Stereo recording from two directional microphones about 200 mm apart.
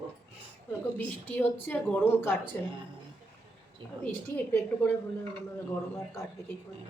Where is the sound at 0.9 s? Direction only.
10° left (ahead or behind).